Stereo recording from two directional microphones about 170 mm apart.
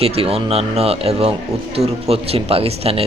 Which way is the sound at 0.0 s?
35° right (ahead or behind).